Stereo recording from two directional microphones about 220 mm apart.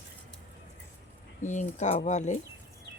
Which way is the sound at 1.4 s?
35° left (ahead or behind).